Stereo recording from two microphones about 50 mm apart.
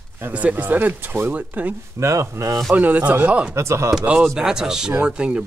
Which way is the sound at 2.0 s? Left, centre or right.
Right.